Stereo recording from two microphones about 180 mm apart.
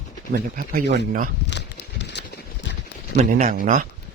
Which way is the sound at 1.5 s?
75° left (ahead or behind).